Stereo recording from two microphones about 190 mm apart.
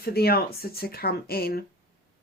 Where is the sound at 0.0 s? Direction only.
55° left (ahead or behind).